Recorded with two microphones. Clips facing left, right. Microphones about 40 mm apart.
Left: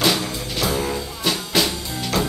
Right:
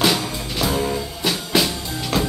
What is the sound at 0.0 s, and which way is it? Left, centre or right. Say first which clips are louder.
Music: right 1 dB; centre.